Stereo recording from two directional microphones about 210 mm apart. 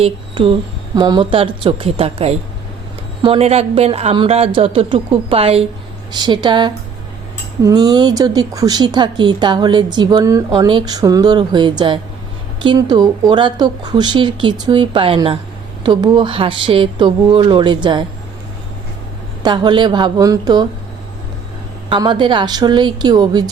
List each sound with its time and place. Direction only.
0.0 s speech: 25° right (ahead or behind)
19.4 s speech: 20° right (ahead or behind)
21.8 s speech: 20° right (ahead or behind)